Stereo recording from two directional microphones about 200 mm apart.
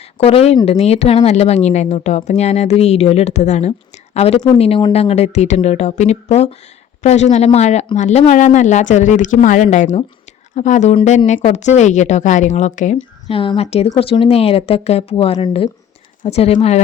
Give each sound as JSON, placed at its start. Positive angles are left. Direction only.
{"t": 0.2, "sound": "speech", "side_deg": 30}
{"t": 13.2, "sound": "speech", "side_deg": 25}